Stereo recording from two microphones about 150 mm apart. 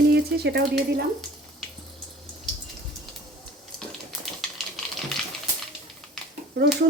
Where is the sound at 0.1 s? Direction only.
90° right.